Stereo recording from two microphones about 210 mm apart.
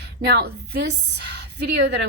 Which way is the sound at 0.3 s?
50° right (ahead or behind).